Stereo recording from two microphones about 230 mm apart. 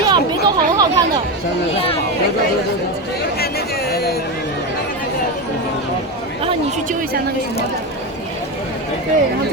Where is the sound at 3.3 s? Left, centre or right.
Left.